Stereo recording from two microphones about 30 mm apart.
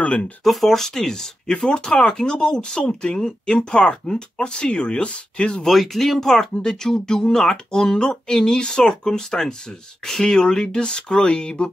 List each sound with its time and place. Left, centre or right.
0.0 s speech: left
0.4 s speech: centre
1.7 s speech: left
3.2 s speech: left
3.5 s speech: left
5.7 s speech: centre; by 11.7 s left